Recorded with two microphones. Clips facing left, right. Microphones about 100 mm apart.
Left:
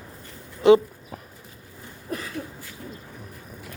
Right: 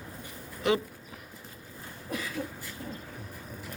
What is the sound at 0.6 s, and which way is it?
Speech, 30° left (ahead or behind).